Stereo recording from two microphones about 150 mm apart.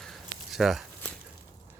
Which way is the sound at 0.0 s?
Centre (ahead or behind).